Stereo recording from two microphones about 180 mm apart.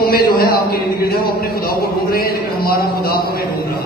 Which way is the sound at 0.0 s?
55° left (ahead or behind).